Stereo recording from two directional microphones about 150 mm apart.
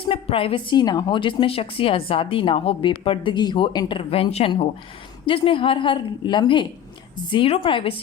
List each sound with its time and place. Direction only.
0.1 s a woman's voice: 40° left (ahead or behind)